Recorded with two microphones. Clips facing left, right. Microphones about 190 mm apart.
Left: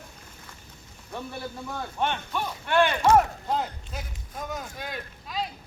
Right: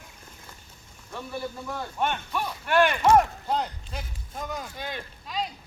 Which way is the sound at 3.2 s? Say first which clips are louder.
Even; 5° left (ahead or behind).